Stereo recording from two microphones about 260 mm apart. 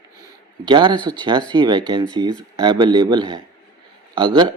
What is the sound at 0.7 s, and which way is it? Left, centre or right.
Speech, centre.